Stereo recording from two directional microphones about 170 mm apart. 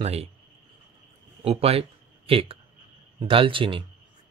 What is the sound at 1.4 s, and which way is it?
Speech, 35° right (ahead or behind).